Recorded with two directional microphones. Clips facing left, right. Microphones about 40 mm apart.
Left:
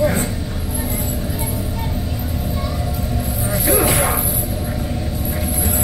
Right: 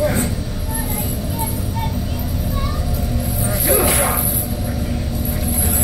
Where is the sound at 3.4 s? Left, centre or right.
Centre.